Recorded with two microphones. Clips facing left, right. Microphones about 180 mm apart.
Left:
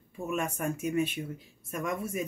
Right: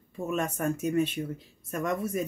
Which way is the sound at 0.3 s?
10° left (ahead or behind).